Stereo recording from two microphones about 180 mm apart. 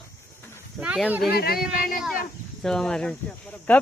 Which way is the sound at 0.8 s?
5° right (ahead or behind).